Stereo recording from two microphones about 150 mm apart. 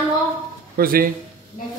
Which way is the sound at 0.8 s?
75° right (ahead or behind).